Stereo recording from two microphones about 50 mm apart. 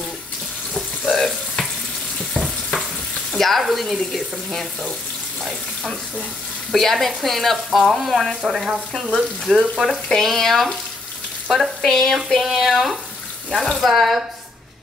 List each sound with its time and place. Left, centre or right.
1.1 s frying: centre
3.3 s speech: centre
6.7 s speech: centre
9.1 s frying: centre
10.0 s speech: centre
11.4 s frying: centre
11.8 s speech: centre